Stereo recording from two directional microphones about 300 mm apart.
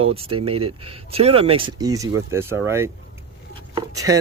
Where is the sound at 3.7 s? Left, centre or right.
Centre.